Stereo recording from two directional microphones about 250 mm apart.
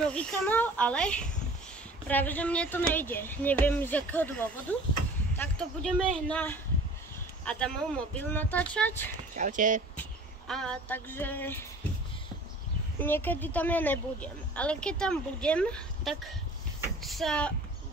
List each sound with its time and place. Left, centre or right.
0.0 s speech: centre
9.3 s speech: right
10.5 s speech: centre
13.0 s speech: centre